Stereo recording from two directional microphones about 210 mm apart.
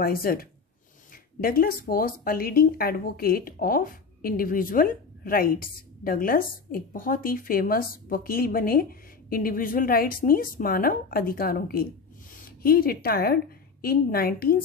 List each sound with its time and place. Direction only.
0.0 s speech: 45° left (ahead or behind)